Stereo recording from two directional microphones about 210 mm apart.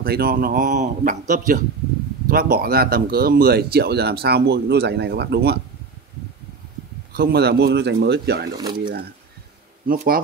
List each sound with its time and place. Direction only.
0.0 s speech: 45° right (ahead or behind)
7.1 s speech: 50° right (ahead or behind)
8.5 s speech: 20° right (ahead or behind)
9.8 s speech: 45° right (ahead or behind)